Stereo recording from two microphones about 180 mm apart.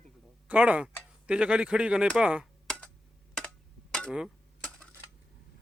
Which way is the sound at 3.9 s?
5° left (ahead or behind).